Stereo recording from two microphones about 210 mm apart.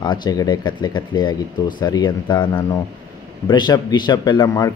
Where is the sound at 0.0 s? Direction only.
20° left (ahead or behind).